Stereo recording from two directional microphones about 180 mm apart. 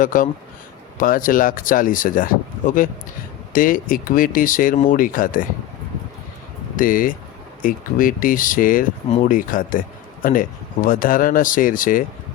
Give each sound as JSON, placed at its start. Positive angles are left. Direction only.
{"t": 0.0, "sound": "speech", "side_deg": 45}
{"t": 6.7, "sound": "speech", "side_deg": 50}